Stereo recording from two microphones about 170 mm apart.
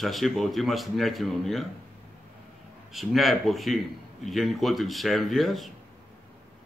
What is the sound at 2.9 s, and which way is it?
A man's voice, centre (ahead or behind).